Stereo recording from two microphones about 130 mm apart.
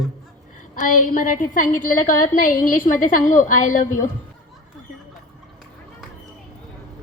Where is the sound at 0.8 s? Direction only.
90° left.